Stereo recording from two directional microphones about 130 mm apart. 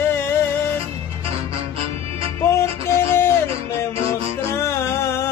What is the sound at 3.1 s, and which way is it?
Music, 20° left (ahead or behind).